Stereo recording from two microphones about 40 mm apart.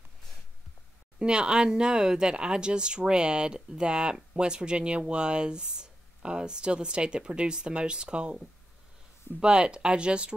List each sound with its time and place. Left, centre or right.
1.2 s speech: right
9.4 s speech: right